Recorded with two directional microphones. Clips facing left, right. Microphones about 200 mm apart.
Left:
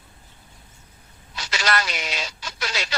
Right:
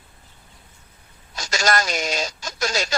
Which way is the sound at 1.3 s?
45° right (ahead or behind).